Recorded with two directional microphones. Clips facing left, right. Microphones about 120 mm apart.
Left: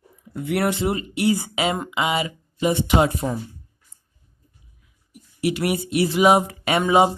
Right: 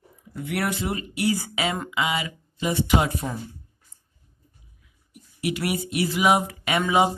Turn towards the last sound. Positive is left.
turn(degrees=30)  # may be behind; listen again after turning